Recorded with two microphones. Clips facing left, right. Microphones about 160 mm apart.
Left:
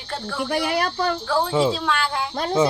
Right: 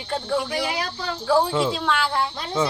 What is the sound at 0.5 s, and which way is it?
Speech, 55° left (ahead or behind).